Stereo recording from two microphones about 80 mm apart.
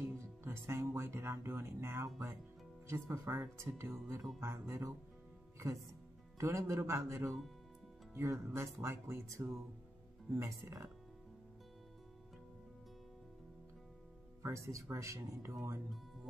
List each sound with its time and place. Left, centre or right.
0.0 s speech: right
6.3 s speech: right
14.4 s speech: right